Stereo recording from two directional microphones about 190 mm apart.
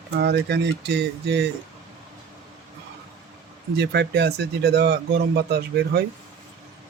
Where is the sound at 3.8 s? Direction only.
60° right (ahead or behind).